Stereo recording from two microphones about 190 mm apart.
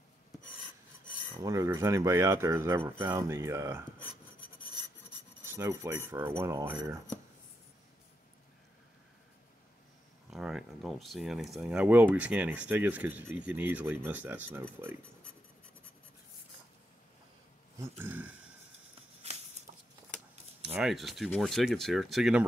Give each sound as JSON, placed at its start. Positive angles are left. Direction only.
{"t": 1.4, "sound": "speech", "side_deg": -20}
{"t": 5.4, "sound": "speech", "side_deg": -15}
{"t": 10.3, "sound": "speech", "side_deg": 0}
{"t": 17.7, "sound": "speech", "side_deg": -15}
{"t": 20.6, "sound": "speech", "side_deg": -5}